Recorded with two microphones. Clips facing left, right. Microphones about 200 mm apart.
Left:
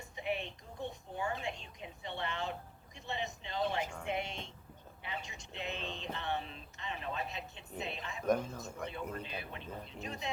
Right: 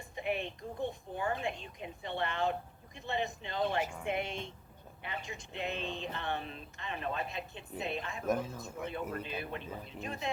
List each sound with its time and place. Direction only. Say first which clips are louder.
0.0 s a sound: right 2 dB; 55° right (ahead or behind)
4.0 s speech: right 3 dB; 55° right (ahead or behind)
8.3 s speech: left 1 dB; 5° right (ahead or behind)
9.1 s speech: right 4 dB; 55° right (ahead or behind)